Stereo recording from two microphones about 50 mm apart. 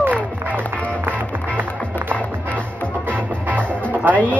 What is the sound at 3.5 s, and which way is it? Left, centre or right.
Music, right.